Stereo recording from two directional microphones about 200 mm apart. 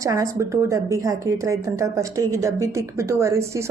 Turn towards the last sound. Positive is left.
turn(degrees=-15)  # may be behind; listen again after turning